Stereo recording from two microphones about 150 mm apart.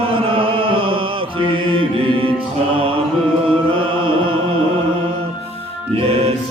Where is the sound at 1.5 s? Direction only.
35° right (ahead or behind).